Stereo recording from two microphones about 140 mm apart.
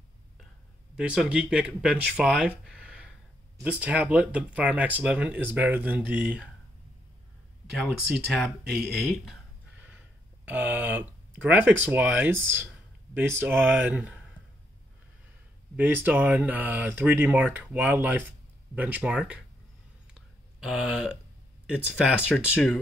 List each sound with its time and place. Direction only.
0.9 s speech: 5° right (ahead or behind)
7.7 s speech: centre (ahead or behind)
9.8 s speech: 10° right (ahead or behind)
15.7 s speech: 15° right (ahead or behind)
20.2 s a sound: 5° right (ahead or behind)
21.6 s speech: 5° right (ahead or behind)